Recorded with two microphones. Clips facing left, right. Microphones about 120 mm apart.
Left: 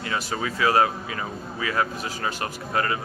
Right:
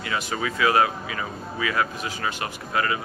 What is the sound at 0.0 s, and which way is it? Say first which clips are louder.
Speech: even; 35° left (ahead or behind).